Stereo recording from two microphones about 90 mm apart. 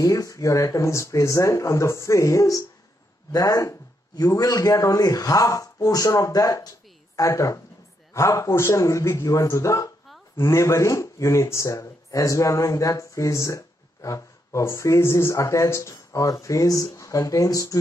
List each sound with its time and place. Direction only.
0.0 s speech: 40° left (ahead or behind)